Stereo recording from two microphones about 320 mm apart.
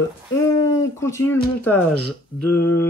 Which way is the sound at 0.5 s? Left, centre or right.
Centre.